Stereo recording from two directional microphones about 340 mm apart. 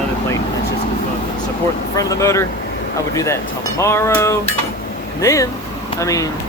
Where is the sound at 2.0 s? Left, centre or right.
Centre.